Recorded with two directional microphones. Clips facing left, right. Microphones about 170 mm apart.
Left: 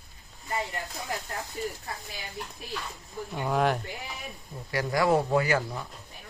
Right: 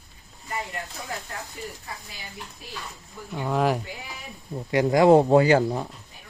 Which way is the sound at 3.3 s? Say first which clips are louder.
Right 2 dB; centre (ahead or behind).